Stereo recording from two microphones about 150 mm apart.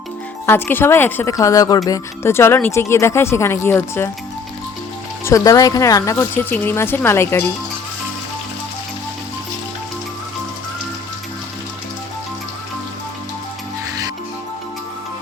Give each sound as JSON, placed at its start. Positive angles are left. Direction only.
{"t": 0.4, "sound": "speech", "side_deg": 15}
{"t": 5.2, "sound": "speech", "side_deg": 20}